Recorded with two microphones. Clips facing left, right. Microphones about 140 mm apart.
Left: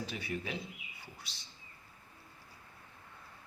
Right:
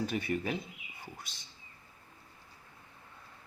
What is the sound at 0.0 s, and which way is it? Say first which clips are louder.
Speech: right 6 dB; 50° right (ahead or behind).